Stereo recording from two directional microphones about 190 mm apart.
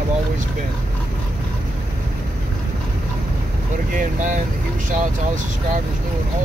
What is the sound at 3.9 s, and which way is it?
Speech, 45° right (ahead or behind).